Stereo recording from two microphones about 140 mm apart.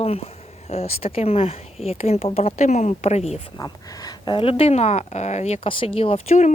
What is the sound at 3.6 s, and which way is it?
Speech, 25° left (ahead or behind).